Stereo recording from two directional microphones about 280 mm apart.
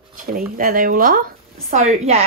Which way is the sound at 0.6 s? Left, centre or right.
Right.